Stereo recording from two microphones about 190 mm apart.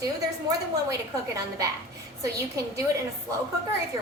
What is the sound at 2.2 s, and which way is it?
Speech, 15° right (ahead or behind).